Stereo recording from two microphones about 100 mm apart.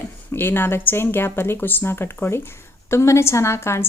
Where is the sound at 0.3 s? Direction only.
20° left (ahead or behind).